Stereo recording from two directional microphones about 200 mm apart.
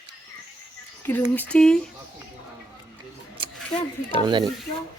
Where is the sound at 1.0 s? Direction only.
10° left (ahead or behind).